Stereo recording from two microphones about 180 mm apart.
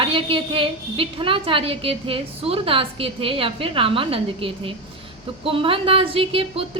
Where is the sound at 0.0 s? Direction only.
30° right (ahead or behind).